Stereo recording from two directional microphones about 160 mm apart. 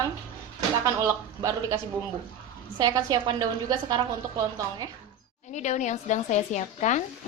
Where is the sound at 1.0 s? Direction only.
20° right (ahead or behind).